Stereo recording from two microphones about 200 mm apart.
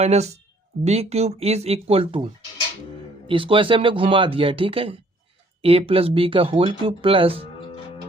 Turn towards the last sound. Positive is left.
turn(degrees=-25)  # may be behind; listen again after turning